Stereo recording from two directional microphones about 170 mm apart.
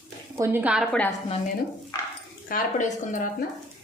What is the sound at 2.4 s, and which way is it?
Speech, 55° left (ahead or behind).